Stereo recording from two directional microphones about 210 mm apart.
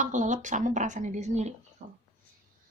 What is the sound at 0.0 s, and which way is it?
A woman's voice, 35° right (ahead or behind).